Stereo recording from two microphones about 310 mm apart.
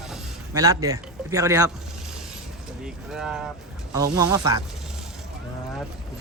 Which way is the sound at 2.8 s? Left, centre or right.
Centre.